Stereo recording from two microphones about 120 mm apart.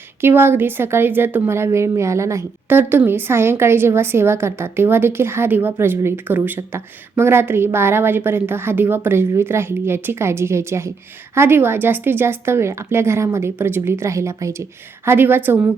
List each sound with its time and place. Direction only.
0.2 s a woman's voice: 20° right (ahead or behind)